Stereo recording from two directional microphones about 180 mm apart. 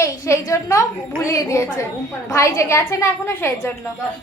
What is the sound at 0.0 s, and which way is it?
A woman's voice, 15° left (ahead or behind).